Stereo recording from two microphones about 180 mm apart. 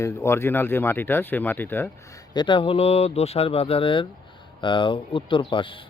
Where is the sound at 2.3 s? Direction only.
25° left (ahead or behind).